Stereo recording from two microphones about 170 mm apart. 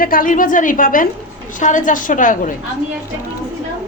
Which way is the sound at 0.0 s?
55° left (ahead or behind).